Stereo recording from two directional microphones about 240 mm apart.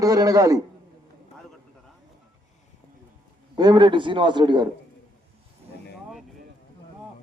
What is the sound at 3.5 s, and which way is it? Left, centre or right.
A man's voice, centre.